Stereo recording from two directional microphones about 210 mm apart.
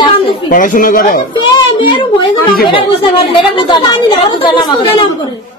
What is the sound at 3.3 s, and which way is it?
Speech, 20° left (ahead or behind).